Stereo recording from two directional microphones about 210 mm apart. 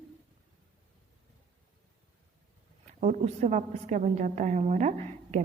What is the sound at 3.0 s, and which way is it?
A woman's voice, 35° right (ahead or behind).